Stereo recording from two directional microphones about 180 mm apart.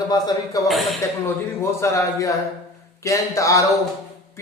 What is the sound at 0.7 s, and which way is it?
Speech, centre (ahead or behind).